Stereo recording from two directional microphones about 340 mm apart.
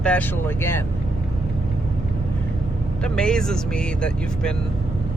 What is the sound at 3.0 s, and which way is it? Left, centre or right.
Speech, centre.